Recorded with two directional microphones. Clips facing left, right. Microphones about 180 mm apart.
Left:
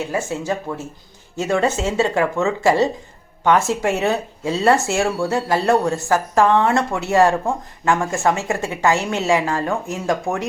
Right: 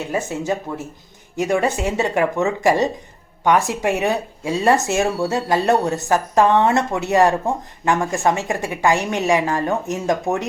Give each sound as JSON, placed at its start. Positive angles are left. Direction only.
{"t": 0.1, "sound": "speech", "side_deg": -20}